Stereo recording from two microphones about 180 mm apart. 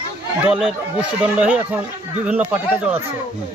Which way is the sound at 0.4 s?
5° right (ahead or behind).